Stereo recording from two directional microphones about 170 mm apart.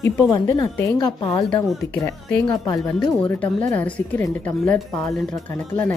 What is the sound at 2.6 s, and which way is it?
Speech, 20° left (ahead or behind).